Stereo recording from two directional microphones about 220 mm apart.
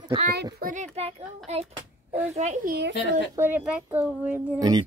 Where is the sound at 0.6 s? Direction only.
35° right (ahead or behind).